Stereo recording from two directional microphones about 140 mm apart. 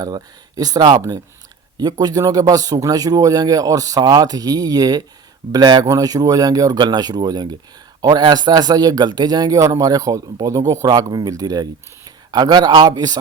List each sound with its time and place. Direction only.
0.0 s speech: 25° right (ahead or behind)